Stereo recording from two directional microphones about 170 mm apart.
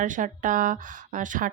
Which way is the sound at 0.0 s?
50° right (ahead or behind).